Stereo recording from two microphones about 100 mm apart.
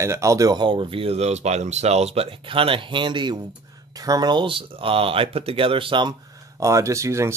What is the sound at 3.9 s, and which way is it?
Speech, 40° right (ahead or behind).